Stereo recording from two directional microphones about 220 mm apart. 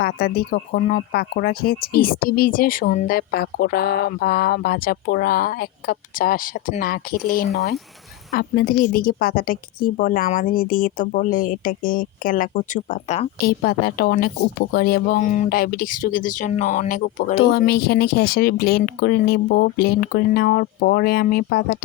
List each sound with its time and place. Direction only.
0.0 s a woman's voice: 45° left (ahead or behind)
13.4 s a woman's voice: 45° left (ahead or behind)